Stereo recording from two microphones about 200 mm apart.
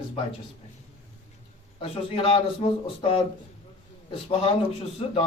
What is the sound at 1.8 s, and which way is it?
Speech, 30° left (ahead or behind).